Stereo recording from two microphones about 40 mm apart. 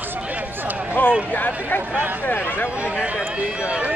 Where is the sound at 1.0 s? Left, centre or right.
Left.